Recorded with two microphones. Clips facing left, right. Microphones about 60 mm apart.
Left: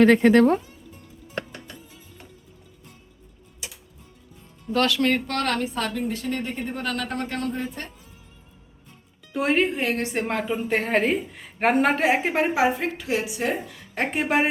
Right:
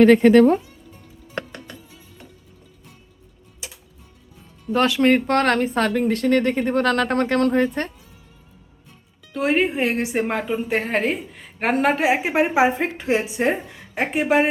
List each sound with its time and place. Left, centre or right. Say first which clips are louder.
4.7 s speech: right 4 dB; right
9.3 s speech: right 2 dB; centre
9.6 s a woman's voice: right 3 dB; centre
12.3 s a woman's voice: right 3 dB; centre
13.9 s a woman's voice: right 4 dB; centre